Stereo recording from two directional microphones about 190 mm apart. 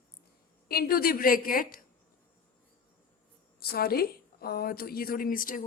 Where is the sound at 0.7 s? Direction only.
50° left (ahead or behind).